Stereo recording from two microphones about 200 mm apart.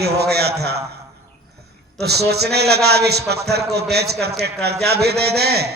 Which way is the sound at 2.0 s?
55° right (ahead or behind).